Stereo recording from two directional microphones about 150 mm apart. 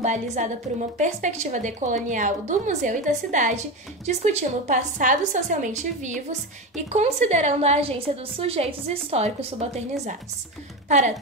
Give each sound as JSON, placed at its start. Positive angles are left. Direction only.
{"t": 0.0, "sound": "a woman's voice", "side_deg": -50}